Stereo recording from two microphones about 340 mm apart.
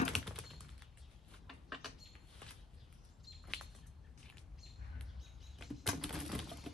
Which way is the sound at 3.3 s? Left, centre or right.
Centre.